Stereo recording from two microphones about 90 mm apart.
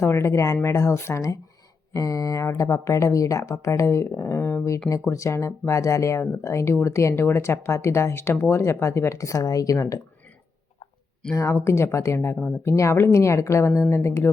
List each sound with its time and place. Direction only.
0.0 s speech: 30° left (ahead or behind)
11.3 s speech: 30° left (ahead or behind)